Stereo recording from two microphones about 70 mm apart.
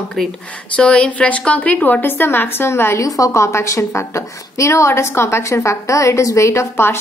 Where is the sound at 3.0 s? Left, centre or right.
Left.